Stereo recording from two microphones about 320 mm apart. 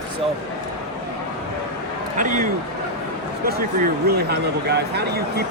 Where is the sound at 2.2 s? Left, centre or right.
Right.